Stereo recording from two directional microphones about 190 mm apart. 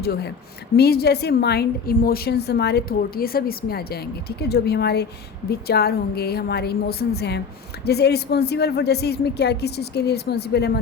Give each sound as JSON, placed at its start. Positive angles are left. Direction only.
{"t": 0.0, "sound": "a woman's voice", "side_deg": 60}